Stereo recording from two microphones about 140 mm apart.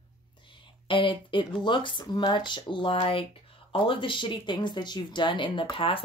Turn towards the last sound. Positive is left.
turn(degrees=40)  # may be behind; listen again after turning